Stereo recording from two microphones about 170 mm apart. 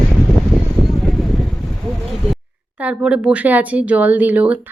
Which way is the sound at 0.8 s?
Centre (ahead or behind).